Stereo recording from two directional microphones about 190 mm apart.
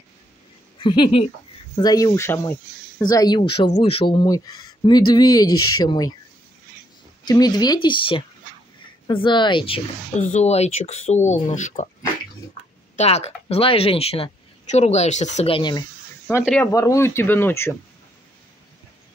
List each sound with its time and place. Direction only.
0.7 s speech: 25° left (ahead or behind)
7.2 s speech: 20° left (ahead or behind)
10.2 s speech: 35° left (ahead or behind)
12.9 s speech: 35° left (ahead or behind)
16.3 s speech: 15° left (ahead or behind)